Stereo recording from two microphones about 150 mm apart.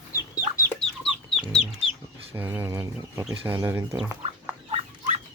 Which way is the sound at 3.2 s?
5° right (ahead or behind).